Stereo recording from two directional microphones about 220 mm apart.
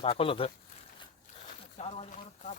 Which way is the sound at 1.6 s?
25° left (ahead or behind).